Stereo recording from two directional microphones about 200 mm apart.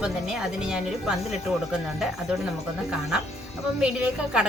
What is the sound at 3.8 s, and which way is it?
Speech, 5° right (ahead or behind).